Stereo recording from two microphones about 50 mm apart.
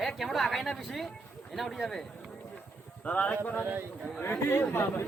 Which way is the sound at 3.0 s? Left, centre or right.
Left.